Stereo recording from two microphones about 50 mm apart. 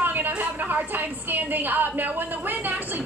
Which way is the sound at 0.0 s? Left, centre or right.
Right.